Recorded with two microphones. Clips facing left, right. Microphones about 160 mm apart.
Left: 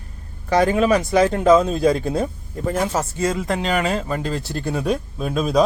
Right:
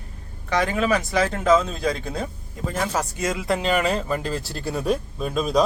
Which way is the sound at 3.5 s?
Centre (ahead or behind).